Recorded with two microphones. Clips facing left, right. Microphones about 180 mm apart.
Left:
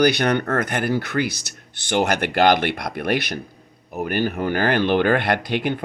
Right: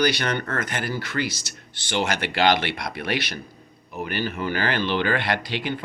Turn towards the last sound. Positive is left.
turn(degrees=55)  # may be behind; listen again after turning